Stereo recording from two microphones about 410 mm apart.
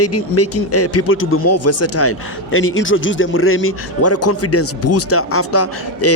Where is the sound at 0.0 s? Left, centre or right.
Left.